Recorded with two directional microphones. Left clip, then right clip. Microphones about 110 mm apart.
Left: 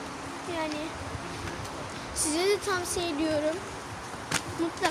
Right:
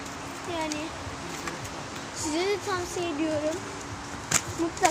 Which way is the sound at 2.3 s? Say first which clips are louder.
Left 1 dB; 65° left (ahead or behind).